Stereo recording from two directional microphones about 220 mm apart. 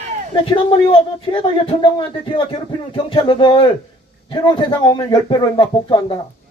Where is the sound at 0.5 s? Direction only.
25° left (ahead or behind).